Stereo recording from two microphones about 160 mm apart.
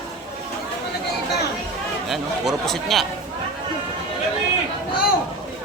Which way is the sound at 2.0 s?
Centre (ahead or behind).